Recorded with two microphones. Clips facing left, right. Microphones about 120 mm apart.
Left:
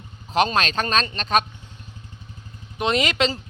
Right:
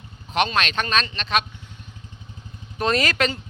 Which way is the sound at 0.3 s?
40° left (ahead or behind).